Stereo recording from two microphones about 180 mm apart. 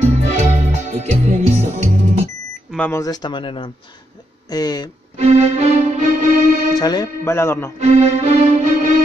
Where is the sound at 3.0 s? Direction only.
25° left (ahead or behind).